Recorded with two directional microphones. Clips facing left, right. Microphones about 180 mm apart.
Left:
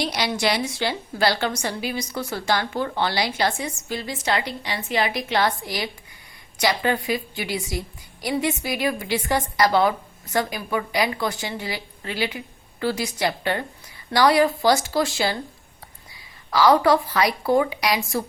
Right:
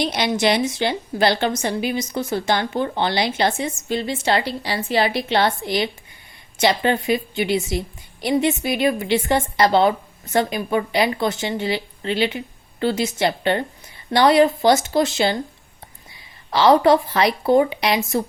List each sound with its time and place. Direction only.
0.0 s a woman's voice: 20° right (ahead or behind)
16.5 s a woman's voice: 25° right (ahead or behind)